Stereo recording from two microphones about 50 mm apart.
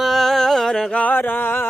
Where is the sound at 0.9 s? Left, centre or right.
Left.